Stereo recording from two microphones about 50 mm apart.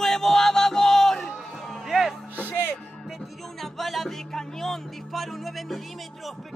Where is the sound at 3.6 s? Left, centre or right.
Centre.